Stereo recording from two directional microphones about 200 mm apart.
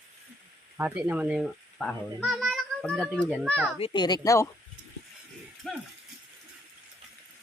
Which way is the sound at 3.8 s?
20° left (ahead or behind).